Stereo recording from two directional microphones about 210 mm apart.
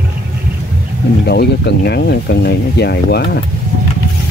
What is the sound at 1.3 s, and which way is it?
Speech, 50° left (ahead or behind).